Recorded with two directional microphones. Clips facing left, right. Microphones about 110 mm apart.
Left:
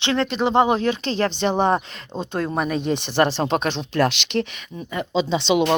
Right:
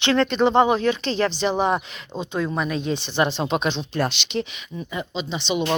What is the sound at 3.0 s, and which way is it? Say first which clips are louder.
Speech: left 4 dB; 55° left (ahead or behind).